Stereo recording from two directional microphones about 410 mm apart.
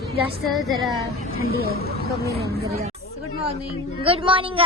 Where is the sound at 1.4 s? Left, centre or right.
Right.